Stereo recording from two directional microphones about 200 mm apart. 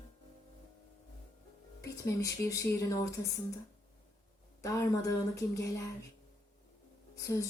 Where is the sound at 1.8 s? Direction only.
15° left (ahead or behind).